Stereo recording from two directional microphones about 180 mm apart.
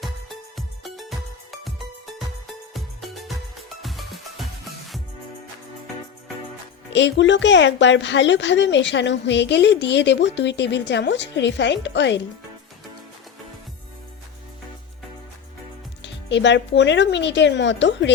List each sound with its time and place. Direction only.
0.0 s music: centre (ahead or behind)
2.1 s music: centre (ahead or behind)
6.9 s a woman's voice: 85° left
16.0 s speech: 80° left